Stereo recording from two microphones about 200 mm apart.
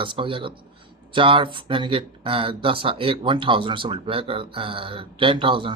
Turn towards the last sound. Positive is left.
turn(degrees=-25)  # may be behind; listen again after turning